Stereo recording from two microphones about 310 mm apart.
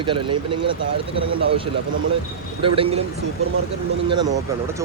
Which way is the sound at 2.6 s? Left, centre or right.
Centre.